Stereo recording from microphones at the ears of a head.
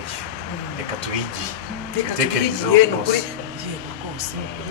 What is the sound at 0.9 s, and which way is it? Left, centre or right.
Speech, left.